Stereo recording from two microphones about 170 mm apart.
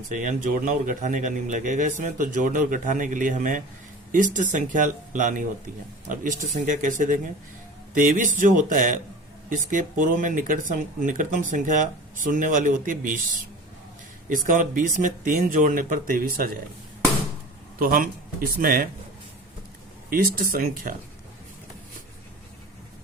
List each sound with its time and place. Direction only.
0.1 s speech: 50° right (ahead or behind)
14.3 s speech: 55° right (ahead or behind)
17.7 s speech: 55° right (ahead or behind)
20.1 s speech: 60° right (ahead or behind)